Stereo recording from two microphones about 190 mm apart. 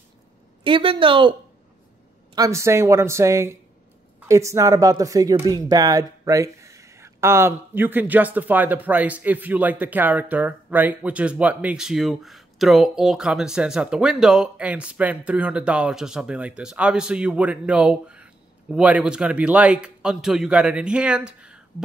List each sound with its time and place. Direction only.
0.7 s speech: 25° right (ahead or behind)
2.3 s speech: 15° right (ahead or behind)